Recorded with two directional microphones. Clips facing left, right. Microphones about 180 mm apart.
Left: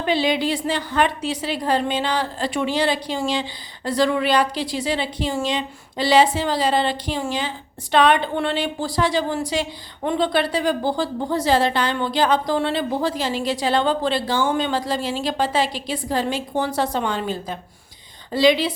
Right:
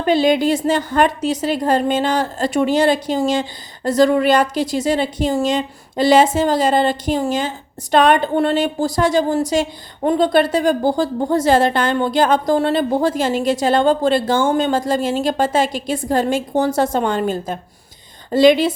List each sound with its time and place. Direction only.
0.0 s a woman's voice: 45° right (ahead or behind)